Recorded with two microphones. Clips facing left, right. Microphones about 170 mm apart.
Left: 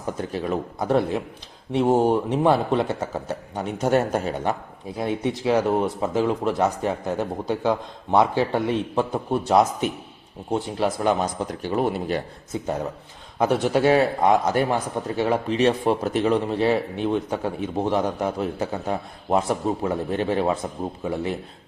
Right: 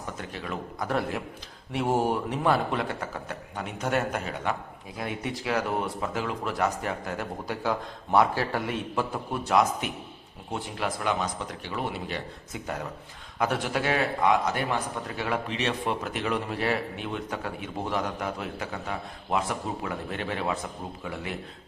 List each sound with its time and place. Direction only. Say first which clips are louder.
0.2 s a man's voice: left 11 dB; 35° left (ahead or behind)
13.4 s a man's voice: left 8 dB; 30° left (ahead or behind)